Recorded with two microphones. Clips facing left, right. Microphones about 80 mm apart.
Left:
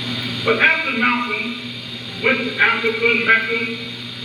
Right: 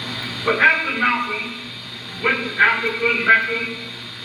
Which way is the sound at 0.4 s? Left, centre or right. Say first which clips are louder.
Even; right.